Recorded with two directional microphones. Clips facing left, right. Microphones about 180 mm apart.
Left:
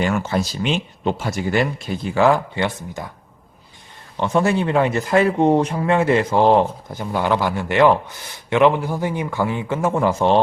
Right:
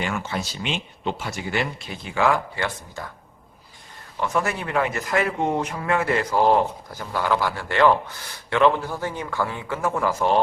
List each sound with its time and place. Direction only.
0.0 s speech: 40° left (ahead or behind)
2.6 s speech: 20° left (ahead or behind)
4.2 s speech: 30° left (ahead or behind)